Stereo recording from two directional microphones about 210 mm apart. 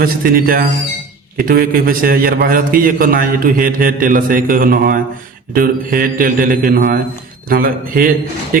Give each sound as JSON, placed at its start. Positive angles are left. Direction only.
{"t": 0.0, "sound": "a man's voice", "side_deg": -45}